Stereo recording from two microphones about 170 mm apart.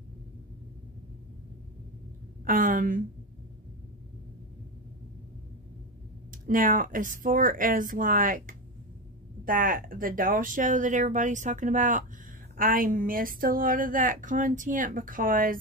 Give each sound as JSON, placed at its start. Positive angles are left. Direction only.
{"t": 2.4, "sound": "a woman's voice", "side_deg": -55}
{"t": 6.3, "sound": "a woman's voice", "side_deg": -55}